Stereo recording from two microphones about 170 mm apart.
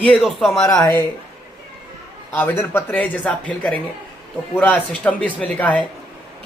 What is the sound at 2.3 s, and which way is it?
A man's voice, 15° left (ahead or behind).